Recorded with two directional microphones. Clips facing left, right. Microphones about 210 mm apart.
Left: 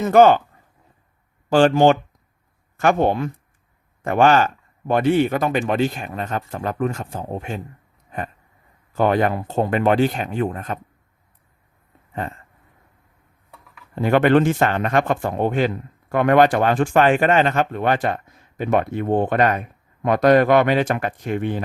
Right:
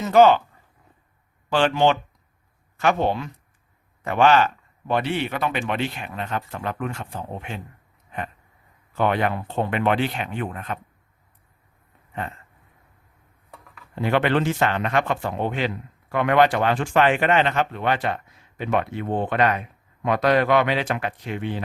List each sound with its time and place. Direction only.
0.0 s a man's voice: 50° left (ahead or behind)
1.5 s a man's voice: 45° left (ahead or behind)
9.0 s speech: 40° left (ahead or behind)
13.9 s a man's voice: 45° left (ahead or behind)